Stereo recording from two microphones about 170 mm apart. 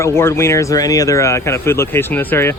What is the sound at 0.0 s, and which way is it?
Speech, 15° left (ahead or behind).